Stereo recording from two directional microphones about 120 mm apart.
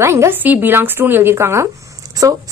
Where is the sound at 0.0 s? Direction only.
20° right (ahead or behind).